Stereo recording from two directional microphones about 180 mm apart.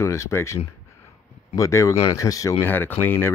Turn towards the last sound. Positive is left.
turn(degrees=10)  # may be behind; listen again after turning